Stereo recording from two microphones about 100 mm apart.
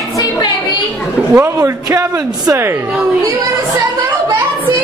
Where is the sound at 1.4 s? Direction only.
30° right (ahead or behind).